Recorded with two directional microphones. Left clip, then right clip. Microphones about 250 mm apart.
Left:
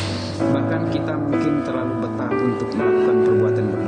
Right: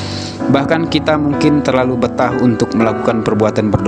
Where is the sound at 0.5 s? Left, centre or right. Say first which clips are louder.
Right 12 dB; right.